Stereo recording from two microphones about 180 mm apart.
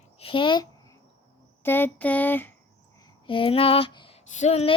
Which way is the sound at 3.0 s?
30° left (ahead or behind).